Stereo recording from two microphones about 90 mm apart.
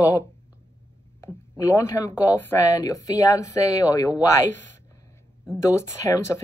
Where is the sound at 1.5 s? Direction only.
35° left (ahead or behind).